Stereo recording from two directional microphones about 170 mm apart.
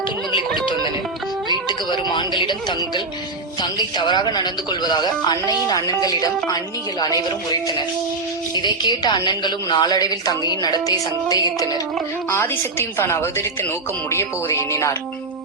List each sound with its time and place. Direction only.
1.6 s speech: 25° left (ahead or behind)
8.5 s a woman's voice: 25° left (ahead or behind)